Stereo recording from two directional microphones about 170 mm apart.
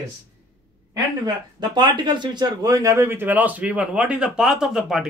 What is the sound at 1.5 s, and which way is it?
Speech, 25° right (ahead or behind).